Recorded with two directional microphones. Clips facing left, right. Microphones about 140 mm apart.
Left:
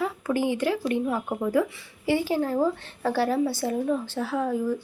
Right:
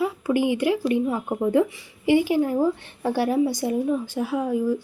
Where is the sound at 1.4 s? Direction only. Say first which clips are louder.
Right 5 dB; 25° right (ahead or behind).